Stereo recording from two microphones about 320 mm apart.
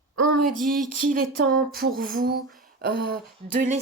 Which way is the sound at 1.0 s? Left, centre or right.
Right.